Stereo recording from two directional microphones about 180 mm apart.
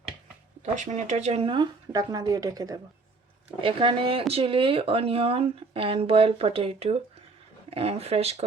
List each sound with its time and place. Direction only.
0.6 s speech: 40° right (ahead or behind); by 2.8 s 20° right (ahead or behind)
3.6 s speech: 30° right (ahead or behind)